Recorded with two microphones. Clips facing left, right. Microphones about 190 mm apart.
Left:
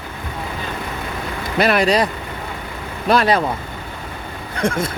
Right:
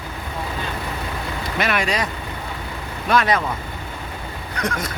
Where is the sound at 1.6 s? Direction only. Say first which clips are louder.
Left 7 dB; 35° left (ahead or behind).